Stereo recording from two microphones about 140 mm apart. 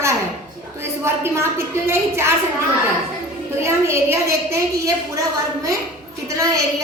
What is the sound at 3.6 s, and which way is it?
Speech, 20° right (ahead or behind).